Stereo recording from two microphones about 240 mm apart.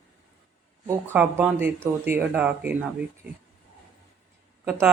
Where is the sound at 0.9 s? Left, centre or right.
Centre.